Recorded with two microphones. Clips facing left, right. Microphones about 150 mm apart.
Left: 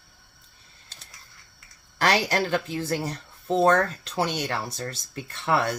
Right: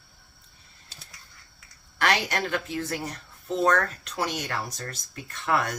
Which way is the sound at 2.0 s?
35° left (ahead or behind).